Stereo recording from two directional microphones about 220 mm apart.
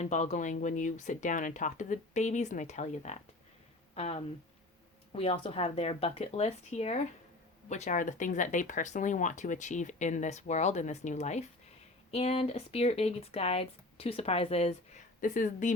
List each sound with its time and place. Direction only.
0.0 s speech: 30° left (ahead or behind)